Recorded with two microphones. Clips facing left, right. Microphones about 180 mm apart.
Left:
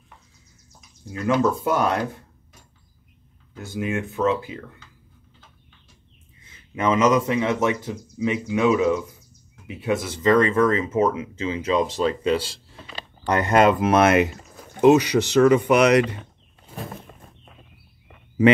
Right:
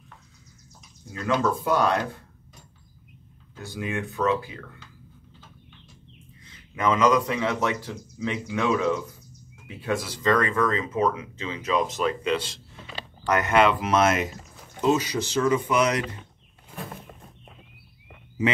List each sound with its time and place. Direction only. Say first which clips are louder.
1.4 s speech: even; 20° left (ahead or behind)
3.5 s speech: left 4 dB; 20° left (ahead or behind)
6.4 s speech: left 2 dB; 25° left (ahead or behind); by 13.9 s 45° left (ahead or behind)
13.9 s speech: left 5 dB; 65° left (ahead or behind)